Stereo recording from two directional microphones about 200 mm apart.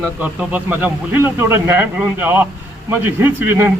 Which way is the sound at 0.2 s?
5° right (ahead or behind).